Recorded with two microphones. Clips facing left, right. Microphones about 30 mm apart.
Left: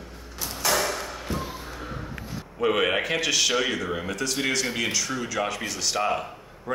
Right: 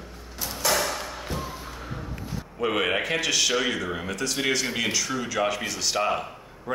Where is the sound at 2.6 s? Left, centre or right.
Centre.